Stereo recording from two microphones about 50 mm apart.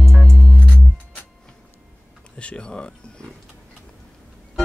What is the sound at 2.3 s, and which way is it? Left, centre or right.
Speech, left.